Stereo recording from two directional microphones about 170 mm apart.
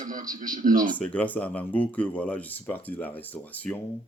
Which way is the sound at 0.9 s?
10° left (ahead or behind).